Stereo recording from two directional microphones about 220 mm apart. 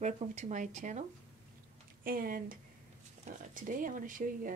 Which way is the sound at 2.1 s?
40° right (ahead or behind).